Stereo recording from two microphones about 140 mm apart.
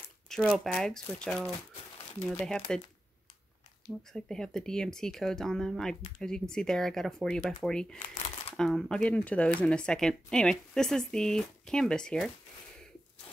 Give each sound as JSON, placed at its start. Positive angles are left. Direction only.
{"t": 0.3, "sound": "a sound", "side_deg": 5}
{"t": 0.7, "sound": "speech", "side_deg": 5}
{"t": 2.7, "sound": "speech", "side_deg": 5}
{"t": 4.1, "sound": "speech", "side_deg": 5}
{"t": 8.0, "sound": "crumpling", "side_deg": 35}
{"t": 8.5, "sound": "speech", "side_deg": 5}